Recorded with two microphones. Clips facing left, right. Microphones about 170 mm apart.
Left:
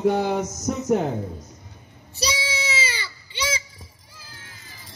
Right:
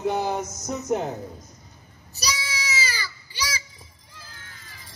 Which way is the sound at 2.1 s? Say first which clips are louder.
Left 4 dB; 30° left (ahead or behind).